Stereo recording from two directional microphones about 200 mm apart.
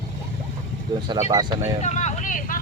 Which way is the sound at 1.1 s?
20° right (ahead or behind).